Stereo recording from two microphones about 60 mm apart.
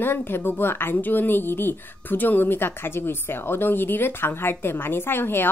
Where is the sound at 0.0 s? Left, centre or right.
Left.